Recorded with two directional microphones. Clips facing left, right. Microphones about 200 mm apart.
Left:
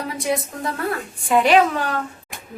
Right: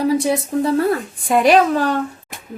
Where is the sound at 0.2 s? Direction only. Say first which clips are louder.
Right 6 dB; 30° right (ahead or behind).